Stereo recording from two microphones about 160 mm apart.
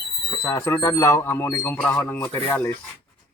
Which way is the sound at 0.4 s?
15° left (ahead or behind).